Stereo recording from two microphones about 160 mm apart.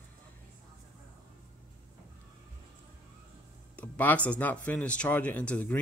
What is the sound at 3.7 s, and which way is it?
Speech, 10° left (ahead or behind).